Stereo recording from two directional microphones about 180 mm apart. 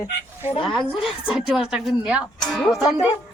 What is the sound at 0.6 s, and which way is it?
Speech, centre (ahead or behind).